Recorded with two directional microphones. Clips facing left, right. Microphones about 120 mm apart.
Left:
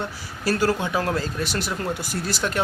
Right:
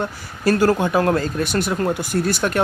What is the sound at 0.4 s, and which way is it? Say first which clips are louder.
Speech: right 6 dB; 50° right (ahead or behind).